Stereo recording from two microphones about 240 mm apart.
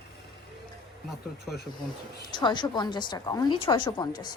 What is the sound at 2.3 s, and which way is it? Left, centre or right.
A woman's voice, centre.